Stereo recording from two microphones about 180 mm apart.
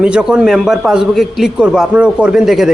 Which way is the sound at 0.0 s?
5° right (ahead or behind).